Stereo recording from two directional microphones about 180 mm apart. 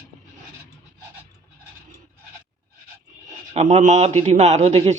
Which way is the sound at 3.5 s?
40° right (ahead or behind).